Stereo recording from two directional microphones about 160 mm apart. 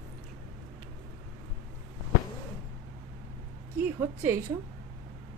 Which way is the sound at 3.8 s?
15° right (ahead or behind).